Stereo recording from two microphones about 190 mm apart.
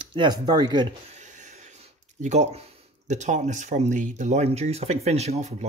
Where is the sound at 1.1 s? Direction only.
40° right (ahead or behind).